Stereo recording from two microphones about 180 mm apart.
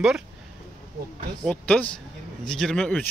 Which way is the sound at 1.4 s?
5° left (ahead or behind).